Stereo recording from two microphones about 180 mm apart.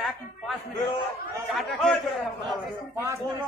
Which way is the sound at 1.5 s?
Centre (ahead or behind).